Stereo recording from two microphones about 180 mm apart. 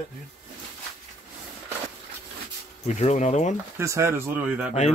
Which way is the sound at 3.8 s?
15° right (ahead or behind).